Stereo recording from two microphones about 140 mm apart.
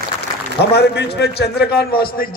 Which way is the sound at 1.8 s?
90° left.